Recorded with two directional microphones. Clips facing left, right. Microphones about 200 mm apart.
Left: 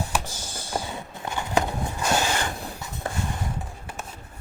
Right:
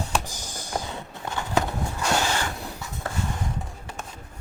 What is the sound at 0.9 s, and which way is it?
Walk, 10° left (ahead or behind).